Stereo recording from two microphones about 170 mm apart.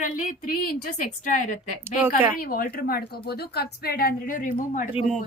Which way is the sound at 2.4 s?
60° left (ahead or behind).